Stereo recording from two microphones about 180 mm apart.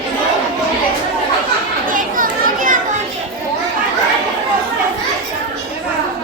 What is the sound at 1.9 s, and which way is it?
Children playing, 50° right (ahead or behind).